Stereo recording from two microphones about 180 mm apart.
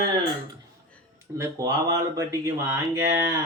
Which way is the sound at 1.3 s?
20° right (ahead or behind).